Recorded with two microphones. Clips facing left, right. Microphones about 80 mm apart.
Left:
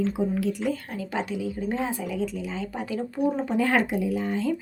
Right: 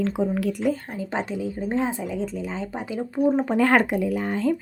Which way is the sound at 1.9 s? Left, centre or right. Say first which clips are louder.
Right 1 dB; right.